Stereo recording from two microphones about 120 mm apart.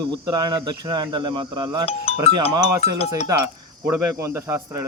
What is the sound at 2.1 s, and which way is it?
Music, 55° left (ahead or behind).